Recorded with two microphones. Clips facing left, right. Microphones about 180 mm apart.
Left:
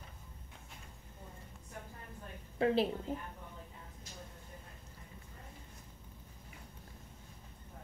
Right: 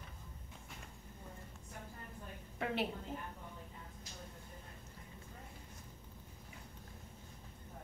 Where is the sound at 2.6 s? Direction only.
35° left (ahead or behind).